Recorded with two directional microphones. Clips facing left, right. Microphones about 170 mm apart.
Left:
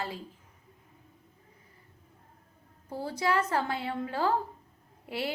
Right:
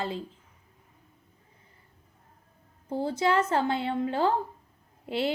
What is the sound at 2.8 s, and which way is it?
A woman's voice, 25° right (ahead or behind).